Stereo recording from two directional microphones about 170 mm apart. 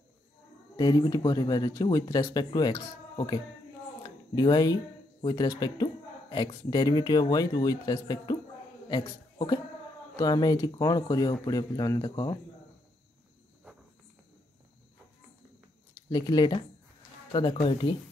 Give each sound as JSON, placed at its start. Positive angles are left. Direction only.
{"t": 0.7, "sound": "speech", "side_deg": 25}
{"t": 4.0, "sound": "a sound", "side_deg": 25}
{"t": 5.2, "sound": "a man's voice", "side_deg": 25}
{"t": 16.1, "sound": "speech", "side_deg": 25}